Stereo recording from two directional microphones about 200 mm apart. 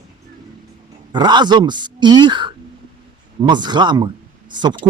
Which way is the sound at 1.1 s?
20° right (ahead or behind).